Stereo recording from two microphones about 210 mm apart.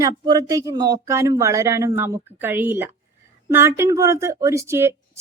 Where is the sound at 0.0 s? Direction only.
15° right (ahead or behind).